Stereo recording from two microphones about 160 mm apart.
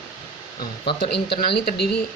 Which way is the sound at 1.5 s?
75° left (ahead or behind).